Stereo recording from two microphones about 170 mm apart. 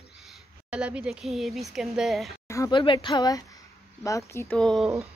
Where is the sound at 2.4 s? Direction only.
15° left (ahead or behind).